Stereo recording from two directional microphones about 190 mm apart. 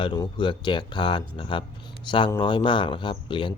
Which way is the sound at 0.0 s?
25° left (ahead or behind).